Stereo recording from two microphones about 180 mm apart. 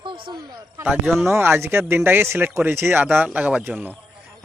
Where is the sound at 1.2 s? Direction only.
15° right (ahead or behind).